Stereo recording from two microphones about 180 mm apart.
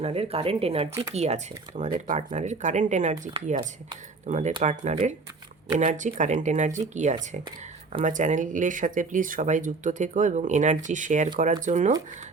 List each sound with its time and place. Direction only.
0.0 s speech: 35° right (ahead or behind)